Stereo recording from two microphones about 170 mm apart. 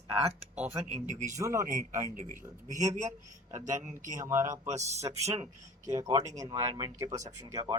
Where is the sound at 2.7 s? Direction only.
15° right (ahead or behind).